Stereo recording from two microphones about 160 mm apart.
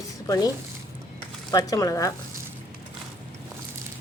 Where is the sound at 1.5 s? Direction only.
20° left (ahead or behind).